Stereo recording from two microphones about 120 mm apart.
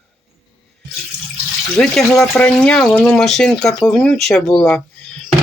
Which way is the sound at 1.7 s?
5° left (ahead or behind).